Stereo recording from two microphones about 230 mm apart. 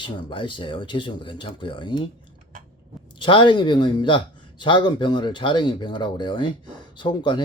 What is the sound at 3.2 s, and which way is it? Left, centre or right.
Speech, left.